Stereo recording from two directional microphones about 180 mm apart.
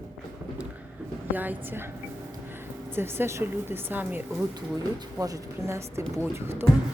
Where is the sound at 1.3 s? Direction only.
10° right (ahead or behind).